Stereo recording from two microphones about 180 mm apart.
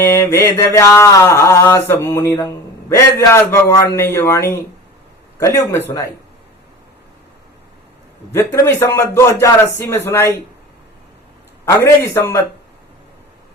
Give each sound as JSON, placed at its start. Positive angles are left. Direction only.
{"t": 0.0, "sound": "mantra", "side_deg": 15}
{"t": 8.3, "sound": "mantra", "side_deg": 15}
{"t": 11.6, "sound": "mantra", "side_deg": 15}